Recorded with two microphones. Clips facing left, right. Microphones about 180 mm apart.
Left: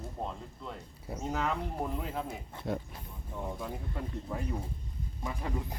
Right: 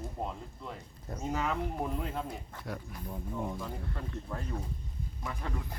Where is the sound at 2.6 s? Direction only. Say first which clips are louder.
Left 5 dB; 25° left (ahead or behind).